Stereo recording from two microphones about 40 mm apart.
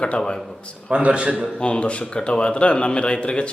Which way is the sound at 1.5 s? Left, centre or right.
Left.